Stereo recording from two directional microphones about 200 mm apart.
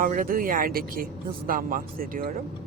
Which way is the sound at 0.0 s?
45° right (ahead or behind).